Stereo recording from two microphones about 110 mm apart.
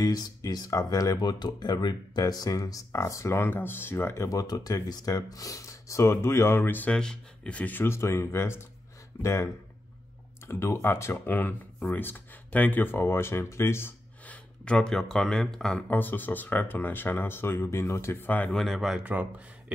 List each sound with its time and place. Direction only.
0.0 s speech: 35° left (ahead or behind); by 15.8 s 5° left (ahead or behind)
15.9 s speech: 15° left (ahead or behind)
18.5 s speech: 5° left (ahead or behind)
19.0 s speech: 15° right (ahead or behind)